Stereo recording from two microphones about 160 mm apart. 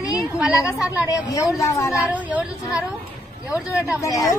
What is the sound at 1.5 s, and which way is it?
Speech, 20° left (ahead or behind).